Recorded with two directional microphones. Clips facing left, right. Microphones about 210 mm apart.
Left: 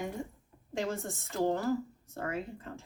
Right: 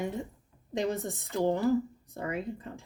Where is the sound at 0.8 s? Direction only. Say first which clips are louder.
Right 4 dB; 20° right (ahead or behind).